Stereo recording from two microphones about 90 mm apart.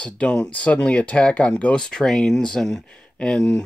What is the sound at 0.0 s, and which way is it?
Speech, 10° left (ahead or behind).